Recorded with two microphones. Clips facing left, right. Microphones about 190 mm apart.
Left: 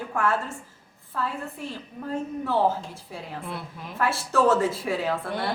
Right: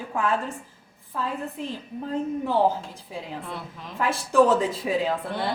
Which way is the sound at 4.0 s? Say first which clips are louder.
Right 3 dB; 15° right (ahead or behind).